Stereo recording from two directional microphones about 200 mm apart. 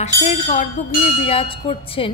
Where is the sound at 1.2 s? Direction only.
30° left (ahead or behind).